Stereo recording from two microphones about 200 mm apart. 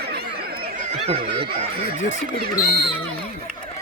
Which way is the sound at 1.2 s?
55° right (ahead or behind).